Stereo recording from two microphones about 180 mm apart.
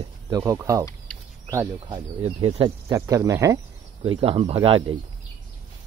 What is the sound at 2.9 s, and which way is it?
Speech, 20° right (ahead or behind).